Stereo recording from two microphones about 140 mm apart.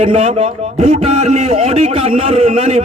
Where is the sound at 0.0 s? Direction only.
45° right (ahead or behind).